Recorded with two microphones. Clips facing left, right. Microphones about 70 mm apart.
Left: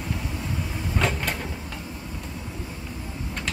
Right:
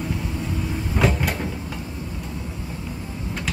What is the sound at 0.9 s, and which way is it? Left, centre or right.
Cupboard open or close, centre.